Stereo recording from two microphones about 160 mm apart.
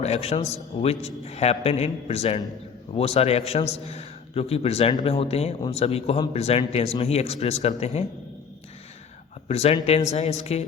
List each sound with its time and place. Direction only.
0.0 s a man's voice: 40° left (ahead or behind)
9.5 s a man's voice: 40° left (ahead or behind)